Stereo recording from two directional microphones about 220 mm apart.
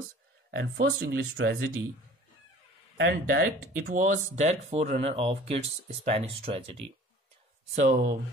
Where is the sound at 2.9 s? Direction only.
50° right (ahead or behind).